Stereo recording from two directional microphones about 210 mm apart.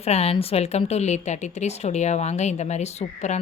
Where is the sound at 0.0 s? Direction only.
30° left (ahead or behind).